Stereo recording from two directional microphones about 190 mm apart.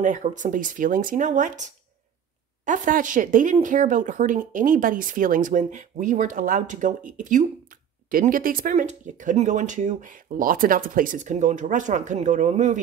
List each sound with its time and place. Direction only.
0.0 s speech: 40° right (ahead or behind)